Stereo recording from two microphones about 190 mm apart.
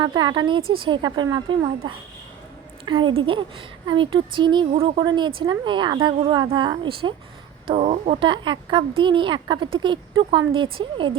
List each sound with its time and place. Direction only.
0.0 s a woman's voice: 25° right (ahead or behind)